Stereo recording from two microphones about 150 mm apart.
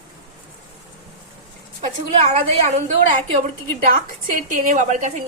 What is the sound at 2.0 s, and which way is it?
Speech, 45° right (ahead or behind).